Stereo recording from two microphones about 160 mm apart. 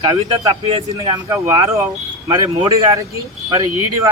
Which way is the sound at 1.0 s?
20° right (ahead or behind).